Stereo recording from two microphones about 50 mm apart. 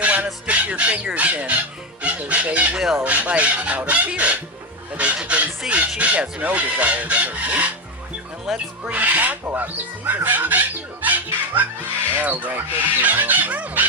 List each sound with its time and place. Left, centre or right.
0.0 s a sound: right
0.4 s bird: right
2.0 s chicken: right
2.7 s a sound: centre
3.0 s speech: right
4.9 s fowl: right
6.0 s speech: right
11.0 s music: right
12.1 s speech: right